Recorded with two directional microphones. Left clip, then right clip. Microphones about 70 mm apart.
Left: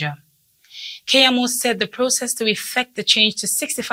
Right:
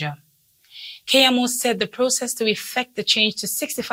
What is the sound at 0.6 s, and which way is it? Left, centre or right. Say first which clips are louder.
A woman's voice: left 4 dB; right.